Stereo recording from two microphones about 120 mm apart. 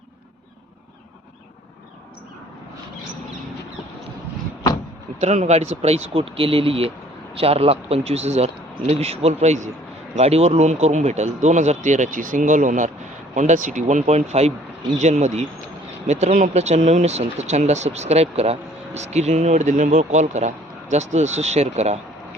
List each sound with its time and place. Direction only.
5.2 s speech: 70° right (ahead or behind)